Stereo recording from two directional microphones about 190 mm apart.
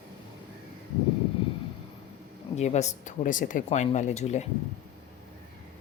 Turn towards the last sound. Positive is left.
turn(degrees=35)  # may be behind; listen again after turning